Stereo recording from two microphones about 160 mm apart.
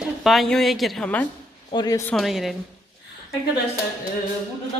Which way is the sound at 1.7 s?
25° left (ahead or behind).